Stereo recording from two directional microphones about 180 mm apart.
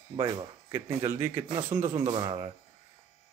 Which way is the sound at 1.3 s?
30° right (ahead or behind).